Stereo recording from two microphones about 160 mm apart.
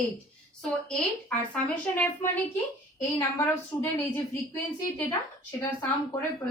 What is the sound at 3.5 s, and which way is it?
Speech, 15° left (ahead or behind).